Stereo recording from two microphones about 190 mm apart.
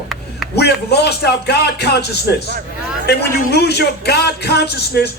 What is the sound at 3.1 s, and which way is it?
A man's voice, 60° left (ahead or behind).